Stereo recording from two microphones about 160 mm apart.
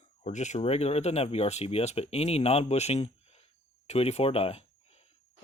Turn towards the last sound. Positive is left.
turn(degrees=40)  # may be behind; listen again after turning